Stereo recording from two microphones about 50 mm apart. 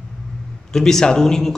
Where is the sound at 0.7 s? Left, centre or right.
Centre.